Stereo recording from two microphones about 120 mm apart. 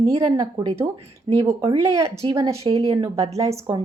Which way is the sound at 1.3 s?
35° right (ahead or behind).